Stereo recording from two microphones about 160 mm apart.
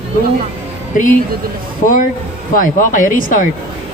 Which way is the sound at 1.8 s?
55° left (ahead or behind).